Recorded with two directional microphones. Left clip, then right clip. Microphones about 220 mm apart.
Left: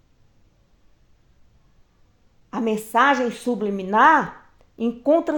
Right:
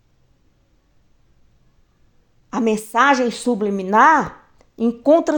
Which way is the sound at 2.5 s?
35° right (ahead or behind).